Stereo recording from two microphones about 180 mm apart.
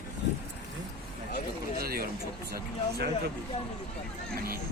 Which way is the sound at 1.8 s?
55° right (ahead or behind).